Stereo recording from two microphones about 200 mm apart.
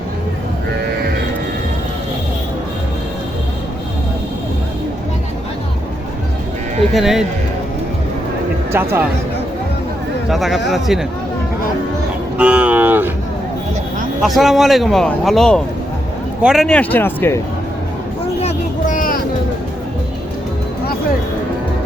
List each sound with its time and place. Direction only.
6.9 s speech: centre (ahead or behind)
8.7 s speech: 10° right (ahead or behind)
10.2 s speech: centre (ahead or behind)
12.4 s vehicle: 5° right (ahead or behind)
14.2 s speech: centre (ahead or behind)
18.4 s vehicle: 40° left (ahead or behind)